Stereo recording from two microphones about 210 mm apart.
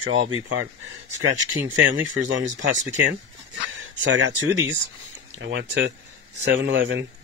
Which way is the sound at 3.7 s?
65° right (ahead or behind).